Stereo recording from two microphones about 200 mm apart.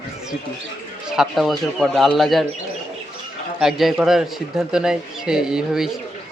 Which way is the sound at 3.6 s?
Centre (ahead or behind).